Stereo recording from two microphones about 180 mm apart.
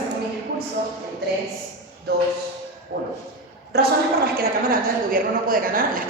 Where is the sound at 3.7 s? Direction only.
60° right (ahead or behind).